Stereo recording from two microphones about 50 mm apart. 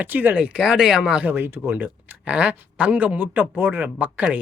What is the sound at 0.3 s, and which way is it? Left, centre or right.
Speech, right.